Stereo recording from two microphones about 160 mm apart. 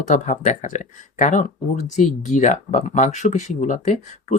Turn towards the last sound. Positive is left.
turn(degrees=50)  # may be behind; listen again after turning